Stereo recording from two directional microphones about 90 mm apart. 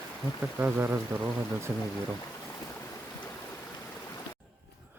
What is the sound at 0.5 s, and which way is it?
Speech, 20° right (ahead or behind).